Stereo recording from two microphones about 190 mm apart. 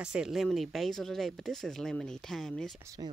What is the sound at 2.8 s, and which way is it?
Speech, 20° right (ahead or behind).